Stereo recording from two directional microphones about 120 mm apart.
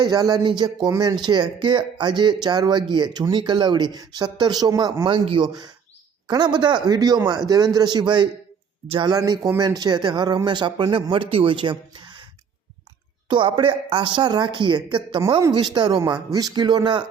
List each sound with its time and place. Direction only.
0.0 s speech: 35° right (ahead or behind)
13.3 s a woman's voice: 45° right (ahead or behind)